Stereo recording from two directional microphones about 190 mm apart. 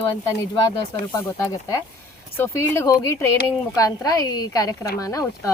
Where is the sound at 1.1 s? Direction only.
15° left (ahead or behind).